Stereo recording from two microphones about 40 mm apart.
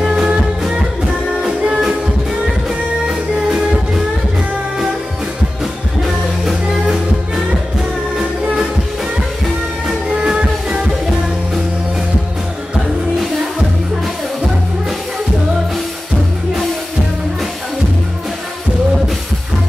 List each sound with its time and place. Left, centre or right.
0.0 s music: right
3.1 s music: centre
5.6 s music: centre
10.2 s music: centre